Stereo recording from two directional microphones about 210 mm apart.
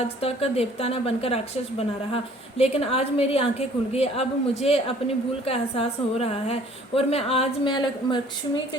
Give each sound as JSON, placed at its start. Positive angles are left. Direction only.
{"t": 0.2, "sound": "a woman's voice", "side_deg": 30}